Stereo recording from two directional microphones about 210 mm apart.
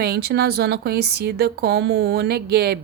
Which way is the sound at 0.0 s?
50° right (ahead or behind).